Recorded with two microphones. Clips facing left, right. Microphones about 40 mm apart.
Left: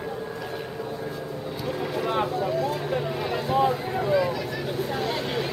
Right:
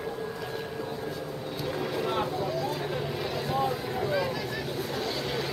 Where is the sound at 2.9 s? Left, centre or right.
Centre.